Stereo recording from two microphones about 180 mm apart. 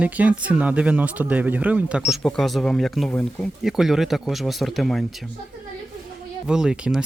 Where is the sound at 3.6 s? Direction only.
Centre (ahead or behind).